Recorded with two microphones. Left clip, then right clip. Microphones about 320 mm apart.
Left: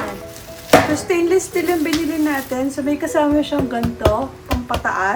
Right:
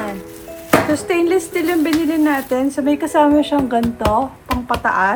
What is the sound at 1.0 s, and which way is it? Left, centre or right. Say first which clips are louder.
Speech: even; centre.